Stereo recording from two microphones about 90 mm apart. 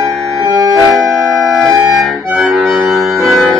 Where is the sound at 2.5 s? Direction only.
Centre (ahead or behind).